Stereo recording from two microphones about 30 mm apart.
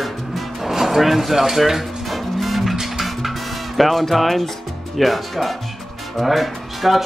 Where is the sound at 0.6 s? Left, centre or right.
Centre.